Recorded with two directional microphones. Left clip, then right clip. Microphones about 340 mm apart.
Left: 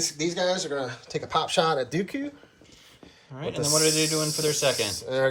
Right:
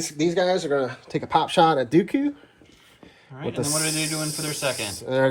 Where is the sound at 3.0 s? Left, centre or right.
Right.